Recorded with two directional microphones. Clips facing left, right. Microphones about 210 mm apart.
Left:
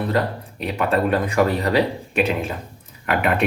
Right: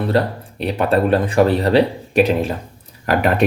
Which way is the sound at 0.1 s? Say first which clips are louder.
Right 4 dB; 30° right (ahead or behind).